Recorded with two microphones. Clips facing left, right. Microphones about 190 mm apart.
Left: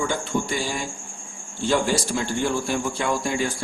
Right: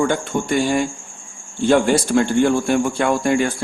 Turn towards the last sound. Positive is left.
turn(degrees=-60)  # may be behind; listen again after turning